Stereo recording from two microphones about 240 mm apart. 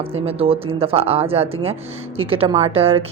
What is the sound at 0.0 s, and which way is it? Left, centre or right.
Speech, right.